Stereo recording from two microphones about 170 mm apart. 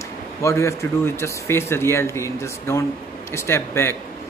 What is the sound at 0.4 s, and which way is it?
Speech, 15° left (ahead or behind).